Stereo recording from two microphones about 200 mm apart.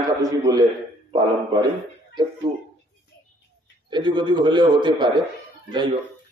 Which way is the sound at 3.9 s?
25° right (ahead or behind).